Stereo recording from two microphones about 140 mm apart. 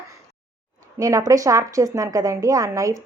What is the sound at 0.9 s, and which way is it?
A woman's voice, 25° right (ahead or behind).